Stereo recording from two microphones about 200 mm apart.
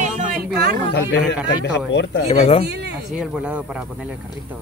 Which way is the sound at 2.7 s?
60° right (ahead or behind).